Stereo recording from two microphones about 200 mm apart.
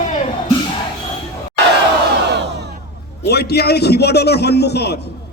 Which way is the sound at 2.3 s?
60° right (ahead or behind).